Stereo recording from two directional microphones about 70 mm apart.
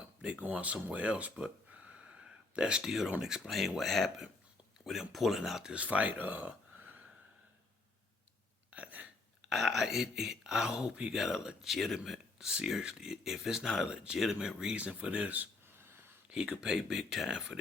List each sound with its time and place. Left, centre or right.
0.2 s speech: centre
5.7 s speech: centre
8.7 s hiccup: centre
9.5 s speech: centre; by 15.4 s right
15.6 s a sound: right
16.3 s speech: centre